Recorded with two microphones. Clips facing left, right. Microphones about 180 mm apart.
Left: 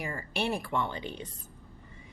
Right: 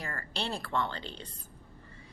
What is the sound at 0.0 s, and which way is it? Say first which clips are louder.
Speech: left 4 dB; 15° left (ahead or behind).